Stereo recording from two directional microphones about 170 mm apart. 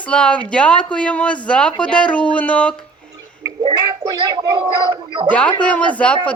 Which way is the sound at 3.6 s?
25° right (ahead or behind).